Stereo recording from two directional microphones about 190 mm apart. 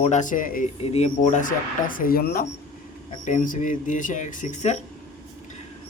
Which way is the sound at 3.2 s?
40° left (ahead or behind).